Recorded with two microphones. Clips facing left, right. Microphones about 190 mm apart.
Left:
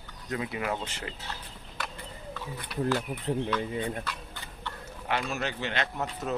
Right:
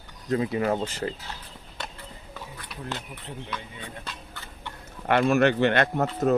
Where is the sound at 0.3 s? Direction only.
35° right (ahead or behind).